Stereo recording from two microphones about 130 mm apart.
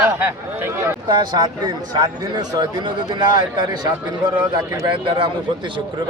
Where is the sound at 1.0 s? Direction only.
35° right (ahead or behind).